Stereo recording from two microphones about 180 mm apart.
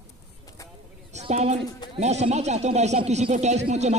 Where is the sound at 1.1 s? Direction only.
40° right (ahead or behind).